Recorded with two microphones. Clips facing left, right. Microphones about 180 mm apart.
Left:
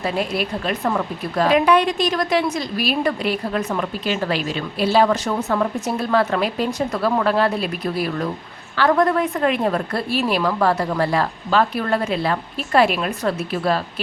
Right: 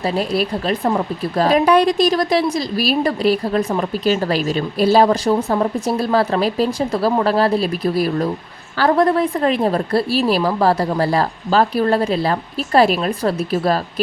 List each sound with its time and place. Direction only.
0.0 s speech: 35° right (ahead or behind)